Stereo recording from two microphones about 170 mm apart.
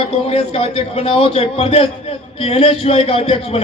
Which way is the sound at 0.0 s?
35° left (ahead or behind).